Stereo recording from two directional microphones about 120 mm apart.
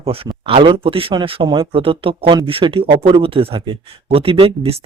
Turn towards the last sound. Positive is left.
turn(degrees=-50)  # may be behind; listen again after turning